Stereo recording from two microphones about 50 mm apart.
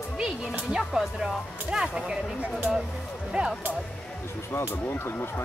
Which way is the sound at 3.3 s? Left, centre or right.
Centre.